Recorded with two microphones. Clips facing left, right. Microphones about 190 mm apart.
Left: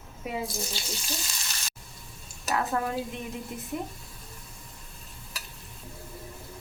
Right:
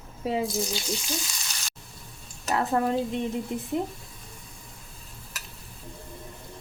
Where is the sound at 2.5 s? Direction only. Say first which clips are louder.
Right 4 dB; 30° right (ahead or behind).